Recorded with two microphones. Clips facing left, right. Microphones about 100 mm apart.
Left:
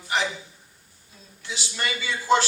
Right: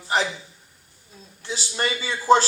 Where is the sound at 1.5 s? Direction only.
35° right (ahead or behind).